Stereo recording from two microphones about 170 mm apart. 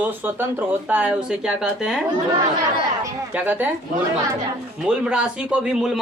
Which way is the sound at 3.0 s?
10° right (ahead or behind).